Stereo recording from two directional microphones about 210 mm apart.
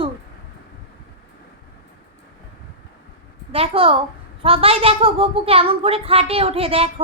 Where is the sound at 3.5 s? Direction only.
25° right (ahead or behind).